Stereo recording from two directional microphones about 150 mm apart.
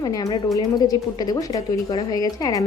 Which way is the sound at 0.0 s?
25° left (ahead or behind).